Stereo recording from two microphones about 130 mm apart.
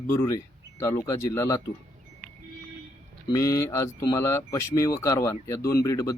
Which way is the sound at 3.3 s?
25° left (ahead or behind).